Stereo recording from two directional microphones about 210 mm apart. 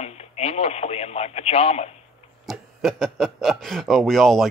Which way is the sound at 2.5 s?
Centre (ahead or behind).